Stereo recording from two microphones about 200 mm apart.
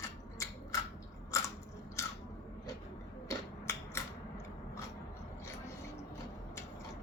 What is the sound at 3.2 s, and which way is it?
Typewriter, 15° left (ahead or behind).